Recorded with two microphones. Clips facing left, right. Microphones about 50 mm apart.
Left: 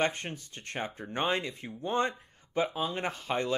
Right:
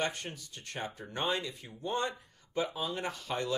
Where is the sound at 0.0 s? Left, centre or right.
Left.